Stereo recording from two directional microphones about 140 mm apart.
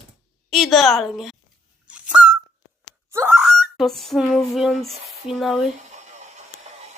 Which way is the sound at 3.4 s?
Centre (ahead or behind).